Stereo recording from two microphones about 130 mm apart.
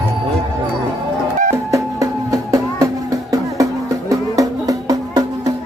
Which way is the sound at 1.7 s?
25° right (ahead or behind).